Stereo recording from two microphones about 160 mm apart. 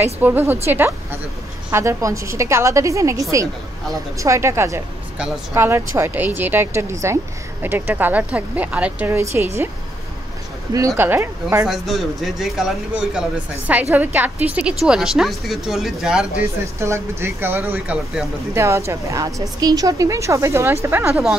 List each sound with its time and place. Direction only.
0.0 s a woman's voice: 15° right (ahead or behind)
11.0 s speech: 15° right (ahead or behind)
11.6 s a woman's voice: centre (ahead or behind)
16.8 s a woman's voice: 15° right (ahead or behind)